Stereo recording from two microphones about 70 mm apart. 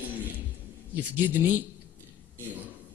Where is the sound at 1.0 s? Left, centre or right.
Right.